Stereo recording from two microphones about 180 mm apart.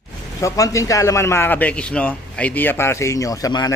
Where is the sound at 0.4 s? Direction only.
15° left (ahead or behind).